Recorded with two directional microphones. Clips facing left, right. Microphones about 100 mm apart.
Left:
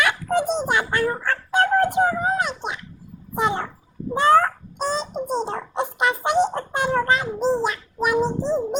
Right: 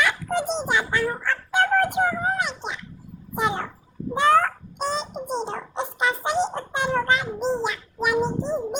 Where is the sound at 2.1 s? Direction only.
20° left (ahead or behind).